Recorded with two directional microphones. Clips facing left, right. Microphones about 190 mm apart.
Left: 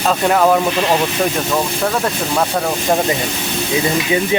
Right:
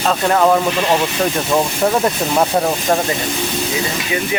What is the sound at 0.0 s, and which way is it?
Speech, 5° left (ahead or behind).